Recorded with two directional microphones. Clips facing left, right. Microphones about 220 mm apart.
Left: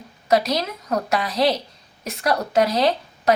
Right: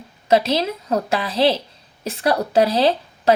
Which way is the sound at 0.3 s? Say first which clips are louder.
Right 3 dB; 30° right (ahead or behind).